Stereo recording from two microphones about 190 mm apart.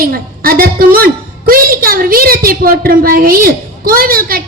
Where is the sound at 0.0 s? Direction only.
50° right (ahead or behind).